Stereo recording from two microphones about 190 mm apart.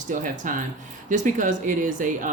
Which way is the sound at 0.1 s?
40° right (ahead or behind).